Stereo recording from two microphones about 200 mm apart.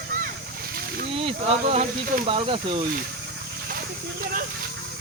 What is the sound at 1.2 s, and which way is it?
Speech, 30° right (ahead or behind).